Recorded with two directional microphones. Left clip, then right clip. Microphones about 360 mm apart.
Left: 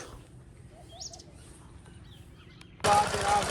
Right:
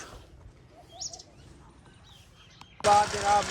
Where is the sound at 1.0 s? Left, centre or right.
Right.